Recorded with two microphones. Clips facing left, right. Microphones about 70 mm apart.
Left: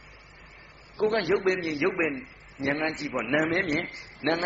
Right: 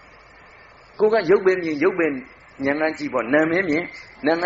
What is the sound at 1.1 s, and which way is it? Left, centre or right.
Speech, right.